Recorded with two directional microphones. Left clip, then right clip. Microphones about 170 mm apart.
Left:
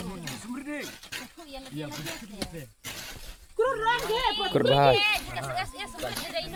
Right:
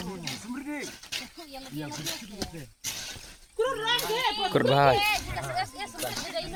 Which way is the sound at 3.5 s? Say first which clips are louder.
Left 2 dB; 50° left (ahead or behind).